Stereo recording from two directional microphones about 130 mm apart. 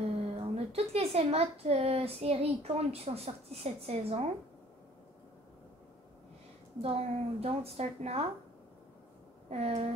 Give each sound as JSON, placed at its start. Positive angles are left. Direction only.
{"t": 0.4, "sound": "speech", "side_deg": -50}
{"t": 6.8, "sound": "speech", "side_deg": -50}
{"t": 9.5, "sound": "speech", "side_deg": -55}